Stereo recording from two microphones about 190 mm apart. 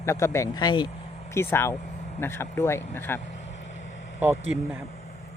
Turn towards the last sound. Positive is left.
turn(degrees=-10)  # may be behind; listen again after turning